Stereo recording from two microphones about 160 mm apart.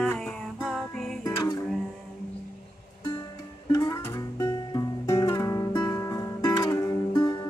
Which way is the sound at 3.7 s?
20° left (ahead or behind).